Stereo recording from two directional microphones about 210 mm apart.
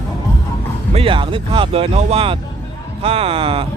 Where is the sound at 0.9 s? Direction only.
25° right (ahead or behind).